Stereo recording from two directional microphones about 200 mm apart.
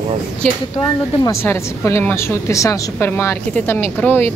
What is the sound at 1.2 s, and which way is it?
Speech, 15° left (ahead or behind).